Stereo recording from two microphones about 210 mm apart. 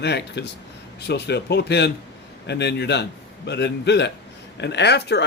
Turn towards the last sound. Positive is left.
turn(degrees=55)  # may be behind; listen again after turning